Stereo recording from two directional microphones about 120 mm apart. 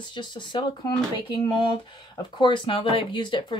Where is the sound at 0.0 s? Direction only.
40° left (ahead or behind).